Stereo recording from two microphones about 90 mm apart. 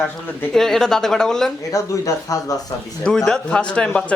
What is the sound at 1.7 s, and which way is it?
Speech, 40° left (ahead or behind).